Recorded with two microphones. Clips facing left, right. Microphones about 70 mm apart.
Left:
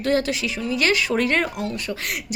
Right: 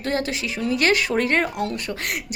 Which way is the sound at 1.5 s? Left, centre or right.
Right.